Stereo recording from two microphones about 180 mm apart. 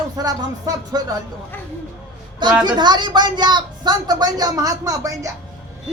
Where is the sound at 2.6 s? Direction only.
25° right (ahead or behind).